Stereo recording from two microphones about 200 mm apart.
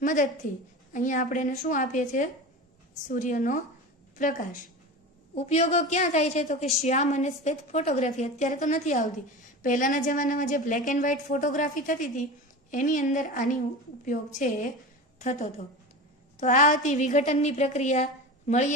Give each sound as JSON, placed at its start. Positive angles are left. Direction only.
{"t": 0.0, "sound": "a woman's voice", "side_deg": 40}